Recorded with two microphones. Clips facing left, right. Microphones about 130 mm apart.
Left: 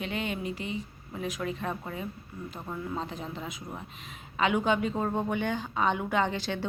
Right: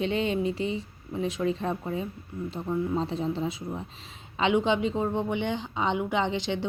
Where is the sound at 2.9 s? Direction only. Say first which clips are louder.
Right 7 dB; 30° right (ahead or behind).